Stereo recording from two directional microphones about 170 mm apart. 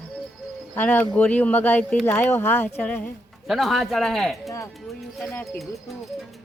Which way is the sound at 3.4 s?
Centre (ahead or behind).